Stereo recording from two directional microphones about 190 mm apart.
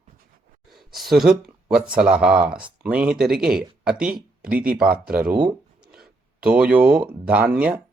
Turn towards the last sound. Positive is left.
turn(degrees=-5)  # may be behind; listen again after turning